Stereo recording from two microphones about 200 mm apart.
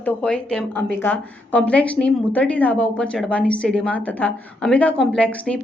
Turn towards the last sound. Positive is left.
turn(degrees=5)  # may be behind; listen again after turning